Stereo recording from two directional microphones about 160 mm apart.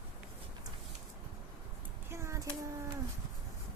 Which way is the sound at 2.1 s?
15° right (ahead or behind).